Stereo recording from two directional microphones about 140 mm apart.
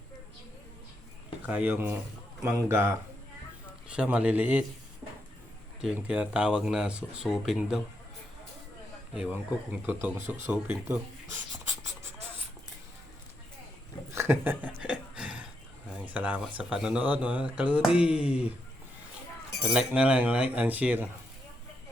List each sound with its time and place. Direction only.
1.5 s speech: 10° right (ahead or behind)
3.8 s speech: 5° right (ahead or behind)
5.8 s speech: 10° right (ahead or behind)
9.1 s speech: 10° right (ahead or behind)
14.2 s speech: 15° right (ahead or behind)
14.8 s a sound: 5° right (ahead or behind)
15.9 s speech: 10° right (ahead or behind)
19.7 s speech: 5° right (ahead or behind)